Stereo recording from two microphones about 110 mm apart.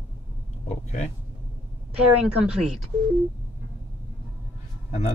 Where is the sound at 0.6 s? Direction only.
90° left.